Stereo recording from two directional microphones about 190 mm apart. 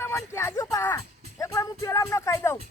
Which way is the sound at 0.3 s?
15° left (ahead or behind).